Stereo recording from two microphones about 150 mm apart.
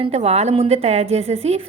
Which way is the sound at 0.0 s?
45° right (ahead or behind).